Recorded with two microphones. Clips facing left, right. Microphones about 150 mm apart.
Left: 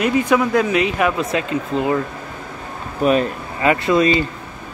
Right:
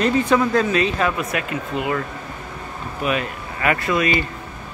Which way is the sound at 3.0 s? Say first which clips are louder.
Left 7 dB; 35° left (ahead or behind).